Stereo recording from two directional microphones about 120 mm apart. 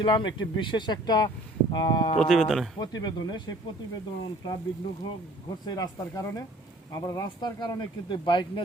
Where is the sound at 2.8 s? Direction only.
35° left (ahead or behind).